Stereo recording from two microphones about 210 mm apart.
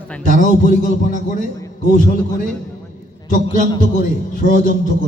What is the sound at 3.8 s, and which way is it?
A man's voice, 40° left (ahead or behind).